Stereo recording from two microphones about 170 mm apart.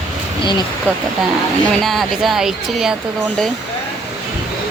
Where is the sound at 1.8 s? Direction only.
Centre (ahead or behind).